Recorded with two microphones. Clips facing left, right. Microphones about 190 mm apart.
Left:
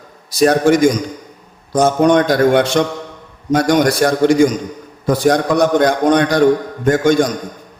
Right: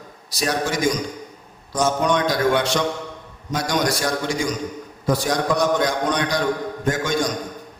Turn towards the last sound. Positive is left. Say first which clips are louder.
# left 9 dB
turn(degrees=55)  # may be behind; listen again after turning